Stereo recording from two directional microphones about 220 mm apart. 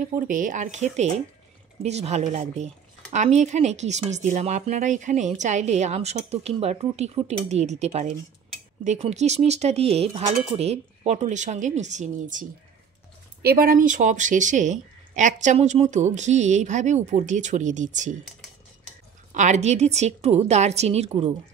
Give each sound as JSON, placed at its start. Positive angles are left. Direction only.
{"t": 0.2, "sound": "speech", "side_deg": -35}
{"t": 19.3, "sound": "a woman's voice", "side_deg": -30}